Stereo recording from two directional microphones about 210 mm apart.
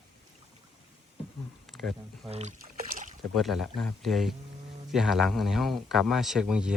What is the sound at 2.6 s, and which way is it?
Boat, 40° right (ahead or behind).